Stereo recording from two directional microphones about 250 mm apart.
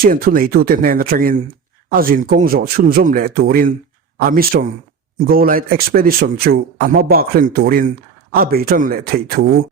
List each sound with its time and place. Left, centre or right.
0.0 s a man's voice: right